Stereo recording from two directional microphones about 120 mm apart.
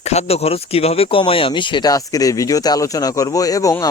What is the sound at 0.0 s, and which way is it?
Speech, 65° left (ahead or behind).